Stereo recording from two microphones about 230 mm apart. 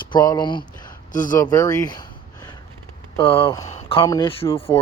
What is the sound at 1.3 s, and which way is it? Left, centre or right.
Speech, centre.